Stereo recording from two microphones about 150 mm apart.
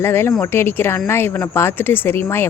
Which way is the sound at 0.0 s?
15° left (ahead or behind).